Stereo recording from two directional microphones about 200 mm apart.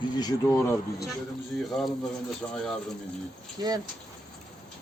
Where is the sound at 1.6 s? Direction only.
Centre (ahead or behind).